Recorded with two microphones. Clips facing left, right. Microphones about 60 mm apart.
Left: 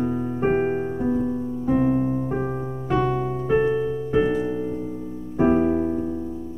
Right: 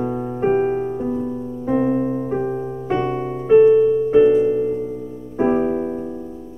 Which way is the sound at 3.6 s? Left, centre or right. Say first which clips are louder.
Right 10 dB; right.